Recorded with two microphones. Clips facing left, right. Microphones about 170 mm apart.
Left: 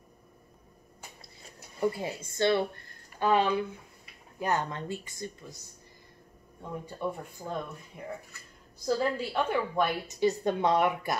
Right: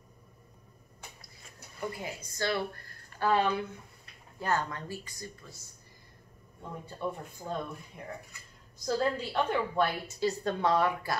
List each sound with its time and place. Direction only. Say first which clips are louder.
1.8 s speech: left 7 dB; 30° left (ahead or behind)
6.9 s a woman's voice: even; 15° left (ahead or behind)
8.8 s a woman's voice: left 1 dB; 10° left (ahead or behind)